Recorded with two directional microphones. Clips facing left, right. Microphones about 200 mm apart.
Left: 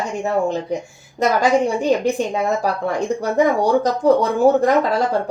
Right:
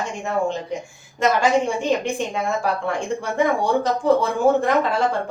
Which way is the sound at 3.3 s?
40° left (ahead or behind).